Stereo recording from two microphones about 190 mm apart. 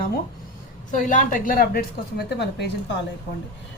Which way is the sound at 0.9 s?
40° left (ahead or behind).